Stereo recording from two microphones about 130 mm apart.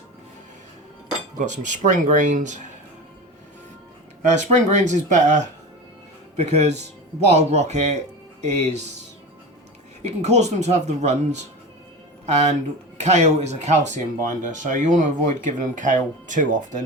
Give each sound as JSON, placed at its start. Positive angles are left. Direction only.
{"t": 1.4, "sound": "speech", "side_deg": -70}
{"t": 4.3, "sound": "speech", "side_deg": -65}
{"t": 10.0, "sound": "speech", "side_deg": -60}